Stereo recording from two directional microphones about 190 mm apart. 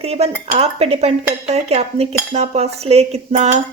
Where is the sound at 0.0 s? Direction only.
30° right (ahead or behind).